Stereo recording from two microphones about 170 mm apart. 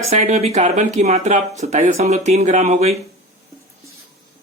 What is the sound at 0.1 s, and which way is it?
Speech, 40° right (ahead or behind).